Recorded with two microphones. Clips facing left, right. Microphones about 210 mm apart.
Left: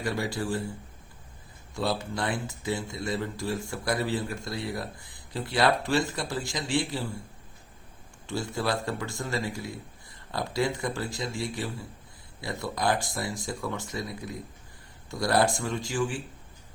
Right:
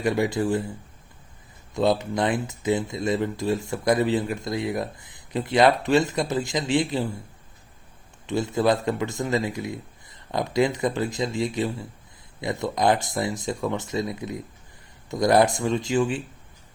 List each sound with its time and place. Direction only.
0.0 s speech: 20° right (ahead or behind)
1.7 s speech: 20° right (ahead or behind)
8.3 s speech: 20° right (ahead or behind)